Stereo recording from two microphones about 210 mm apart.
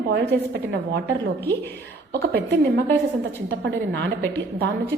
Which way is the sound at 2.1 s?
50° right (ahead or behind).